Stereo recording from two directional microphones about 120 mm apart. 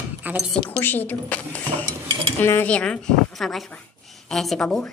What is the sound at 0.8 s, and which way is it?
A woman's voice, 15° left (ahead or behind).